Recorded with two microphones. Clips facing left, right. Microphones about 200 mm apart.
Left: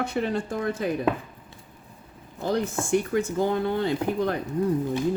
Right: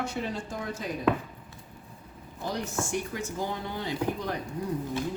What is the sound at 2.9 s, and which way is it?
Speech, 55° left (ahead or behind).